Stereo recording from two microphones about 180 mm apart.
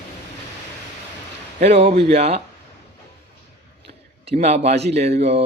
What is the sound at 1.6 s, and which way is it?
Speech, 35° right (ahead or behind).